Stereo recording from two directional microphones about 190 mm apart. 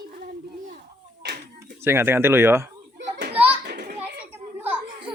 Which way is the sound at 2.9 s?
60° right (ahead or behind).